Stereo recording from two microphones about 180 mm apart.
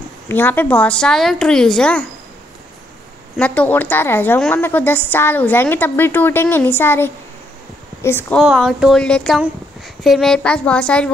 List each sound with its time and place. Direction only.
0.3 s a woman's voice: 10° left (ahead or behind)
3.3 s a woman's voice: 10° left (ahead or behind)
8.4 s a woman's voice: centre (ahead or behind)